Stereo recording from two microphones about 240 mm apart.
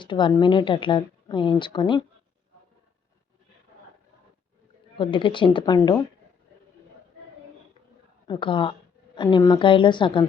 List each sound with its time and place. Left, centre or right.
0.0 s a woman's voice: centre
4.9 s a woman's voice: centre
8.3 s a woman's voice: left